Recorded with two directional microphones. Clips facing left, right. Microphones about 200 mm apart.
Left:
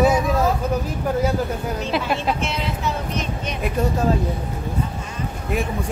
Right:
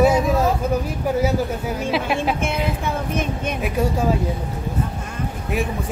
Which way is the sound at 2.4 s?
55° right (ahead or behind).